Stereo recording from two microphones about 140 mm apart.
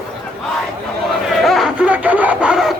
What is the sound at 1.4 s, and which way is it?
Laughter, centre (ahead or behind).